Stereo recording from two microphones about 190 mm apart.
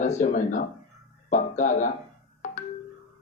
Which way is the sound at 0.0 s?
40° left (ahead or behind).